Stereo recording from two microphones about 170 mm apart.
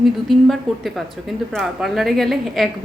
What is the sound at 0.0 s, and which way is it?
Speech, centre (ahead or behind).